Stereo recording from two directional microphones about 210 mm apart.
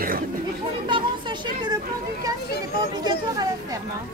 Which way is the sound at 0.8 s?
20° right (ahead or behind).